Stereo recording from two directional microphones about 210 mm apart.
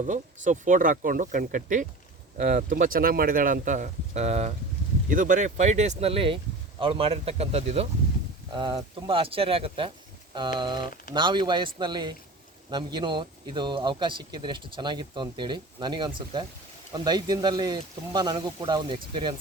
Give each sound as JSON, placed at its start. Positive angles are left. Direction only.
{"t": 0.4, "sound": "speech", "side_deg": -35}